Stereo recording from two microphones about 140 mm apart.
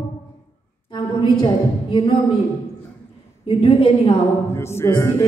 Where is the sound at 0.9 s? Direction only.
35° left (ahead or behind).